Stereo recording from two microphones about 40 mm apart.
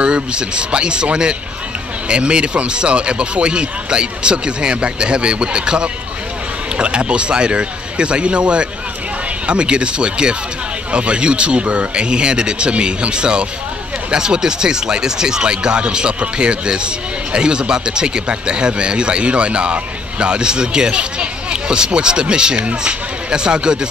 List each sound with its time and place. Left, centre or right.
0.0 s speech: right